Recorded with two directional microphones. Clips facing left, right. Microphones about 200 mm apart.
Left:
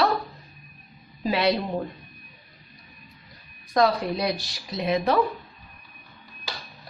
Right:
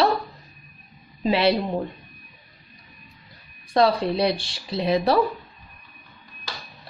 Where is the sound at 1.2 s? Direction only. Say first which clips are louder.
Right 3 dB; 25° right (ahead or behind).